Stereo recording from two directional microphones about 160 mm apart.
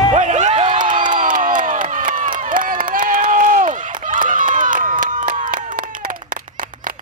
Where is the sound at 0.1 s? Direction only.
50° right (ahead or behind).